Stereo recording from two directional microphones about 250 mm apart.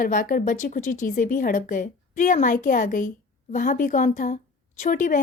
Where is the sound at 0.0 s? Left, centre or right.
Left.